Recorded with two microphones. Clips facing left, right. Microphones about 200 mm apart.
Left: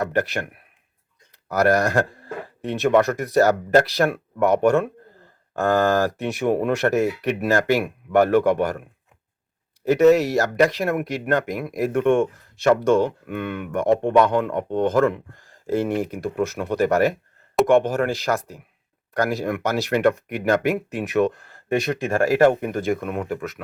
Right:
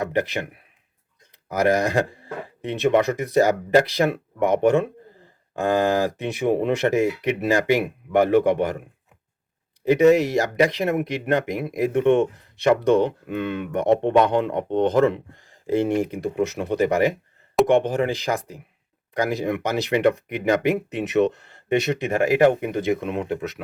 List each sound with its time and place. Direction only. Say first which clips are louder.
0.1 s speech: even; 15° right (ahead or behind)
1.5 s speech: left 1 dB; 15° right (ahead or behind)
5.2 s a sound: left 1 dB; 15° right (ahead or behind)
6.6 s speech: even; 20° right (ahead or behind)
9.8 s speech: left 1 dB; 15° right (ahead or behind)